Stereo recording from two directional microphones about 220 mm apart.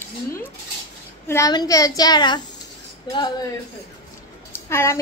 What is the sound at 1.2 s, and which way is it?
A woman's voice, 15° left (ahead or behind).